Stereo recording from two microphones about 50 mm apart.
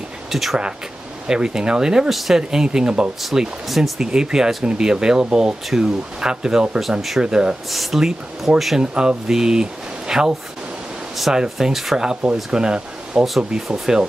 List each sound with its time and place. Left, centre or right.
0.3 s speech: centre
1.2 s speech: centre
3.2 s speech: centre
4.0 s speech: centre
6.8 s speech: centre
7.2 s speech: centre
7.7 s speech: centre
11.4 s speech: centre